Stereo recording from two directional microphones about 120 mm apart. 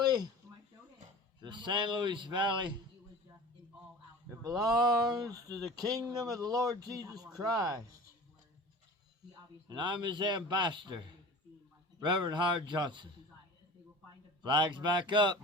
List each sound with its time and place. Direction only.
1.4 s speech: 40° right (ahead or behind)
4.3 s speech: 30° right (ahead or behind)
9.6 s speech: 40° right (ahead or behind)
14.4 s speech: 40° right (ahead or behind)